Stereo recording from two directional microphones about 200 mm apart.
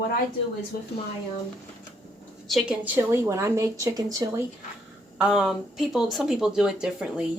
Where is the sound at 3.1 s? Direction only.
15° right (ahead or behind).